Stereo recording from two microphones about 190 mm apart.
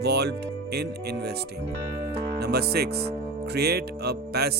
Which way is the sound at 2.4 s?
55° right (ahead or behind).